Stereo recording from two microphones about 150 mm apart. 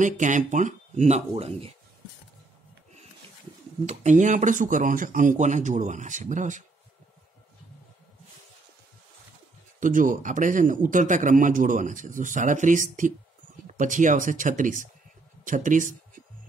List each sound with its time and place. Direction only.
0.0 s speech: 55° right (ahead or behind)
3.8 s speech: 50° right (ahead or behind)
9.8 s speech: 60° right (ahead or behind)